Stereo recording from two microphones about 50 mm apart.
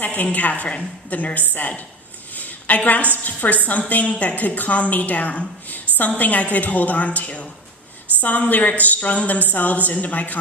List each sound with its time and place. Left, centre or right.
0.0 s a woman's voice: left
2.3 s a sound: left
3.2 s a woman's voice: left